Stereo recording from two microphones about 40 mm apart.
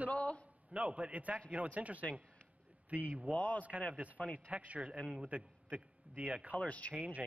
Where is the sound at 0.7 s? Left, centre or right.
Right.